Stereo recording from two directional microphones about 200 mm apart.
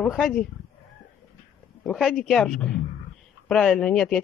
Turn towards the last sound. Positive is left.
turn(degrees=0)  # may be behind; listen again after turning